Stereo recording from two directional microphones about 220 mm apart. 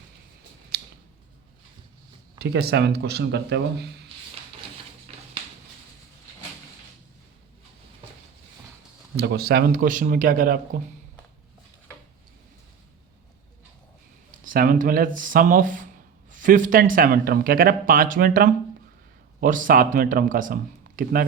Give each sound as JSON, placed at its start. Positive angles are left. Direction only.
{"t": 0.7, "sound": "scissors", "side_deg": -45}
{"t": 2.4, "sound": "speech", "side_deg": -45}
{"t": 9.1, "sound": "speech", "side_deg": -45}
{"t": 14.4, "sound": "speech", "side_deg": -40}